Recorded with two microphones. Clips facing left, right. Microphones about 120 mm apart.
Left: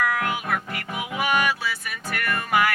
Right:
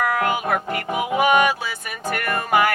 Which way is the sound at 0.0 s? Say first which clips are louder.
Right 4 dB; 35° right (ahead or behind).